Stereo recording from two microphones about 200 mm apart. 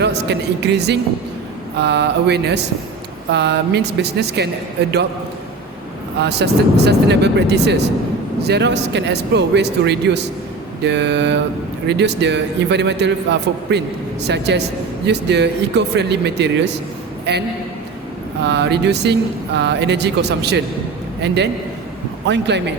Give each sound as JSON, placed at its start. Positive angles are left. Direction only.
{"t": 0.0, "sound": "speech", "side_deg": -60}
{"t": 6.2, "sound": "speech", "side_deg": -55}
{"t": 18.4, "sound": "speech", "side_deg": -60}